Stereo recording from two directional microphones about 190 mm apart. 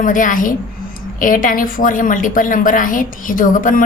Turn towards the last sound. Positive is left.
turn(degrees=45)  # may be behind; listen again after turning